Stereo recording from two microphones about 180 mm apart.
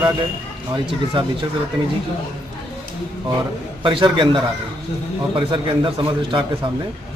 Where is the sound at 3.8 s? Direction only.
25° right (ahead or behind).